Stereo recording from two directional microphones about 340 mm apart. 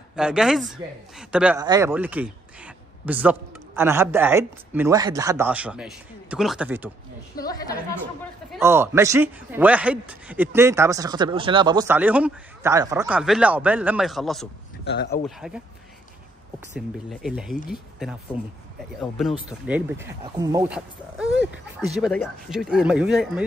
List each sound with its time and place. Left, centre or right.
0.1 s a man's voice: centre
7.4 s a woman's voice: centre
8.5 s a man's voice: centre
14.9 s speech: left
15.2 s a man's voice: centre
16.7 s a man's voice: centre